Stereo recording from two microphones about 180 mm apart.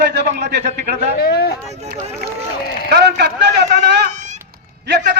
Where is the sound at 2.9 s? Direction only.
65° right (ahead or behind).